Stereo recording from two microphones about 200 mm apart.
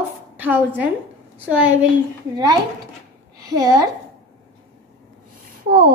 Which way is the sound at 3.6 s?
15° right (ahead or behind).